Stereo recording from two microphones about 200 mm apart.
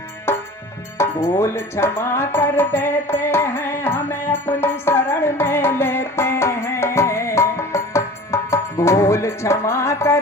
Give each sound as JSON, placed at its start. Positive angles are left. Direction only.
{"t": 0.3, "sound": "music", "side_deg": 10}
{"t": 0.9, "sound": "speech", "side_deg": 15}
{"t": 4.4, "sound": "music", "side_deg": 10}